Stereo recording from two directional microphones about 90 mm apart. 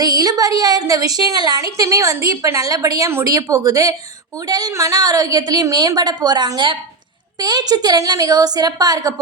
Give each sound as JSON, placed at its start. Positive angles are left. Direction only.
{"t": 0.0, "sound": "a woman's voice", "side_deg": -45}